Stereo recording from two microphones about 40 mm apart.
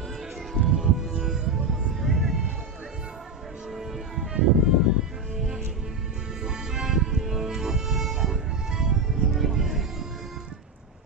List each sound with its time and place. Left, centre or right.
0.6 s music: centre
3.7 s music: centre
4.3 s music: centre